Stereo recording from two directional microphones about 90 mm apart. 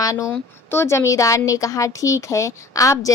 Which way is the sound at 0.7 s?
30° left (ahead or behind).